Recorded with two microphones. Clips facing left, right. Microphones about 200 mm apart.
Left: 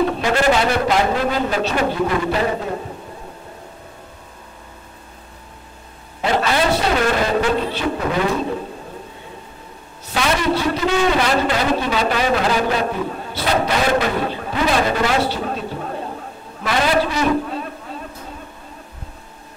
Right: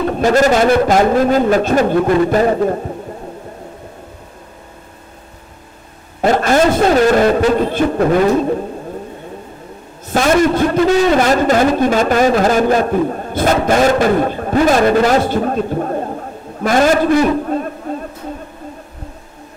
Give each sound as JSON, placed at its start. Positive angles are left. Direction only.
{"t": 0.2, "sound": "a man's voice", "side_deg": -45}
{"t": 6.2, "sound": "a man's voice", "side_deg": -45}
{"t": 10.0, "sound": "a man's voice", "side_deg": -45}